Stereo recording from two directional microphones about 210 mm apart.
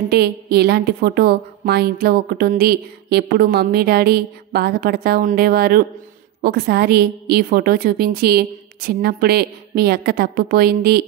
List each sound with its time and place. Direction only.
0.1 s a woman's voice: 50° right (ahead or behind)